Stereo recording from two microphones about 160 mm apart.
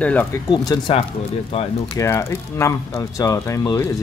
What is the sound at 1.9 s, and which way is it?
Speech, 15° left (ahead or behind).